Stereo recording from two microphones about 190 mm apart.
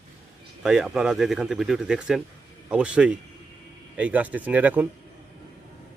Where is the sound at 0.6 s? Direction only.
5° right (ahead or behind).